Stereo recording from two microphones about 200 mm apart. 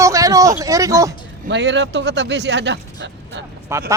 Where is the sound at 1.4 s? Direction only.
60° right (ahead or behind).